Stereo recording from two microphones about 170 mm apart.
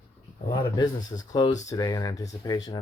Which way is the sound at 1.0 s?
25° left (ahead or behind).